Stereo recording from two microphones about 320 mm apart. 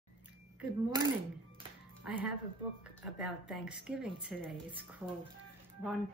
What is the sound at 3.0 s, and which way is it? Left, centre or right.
Speech, centre.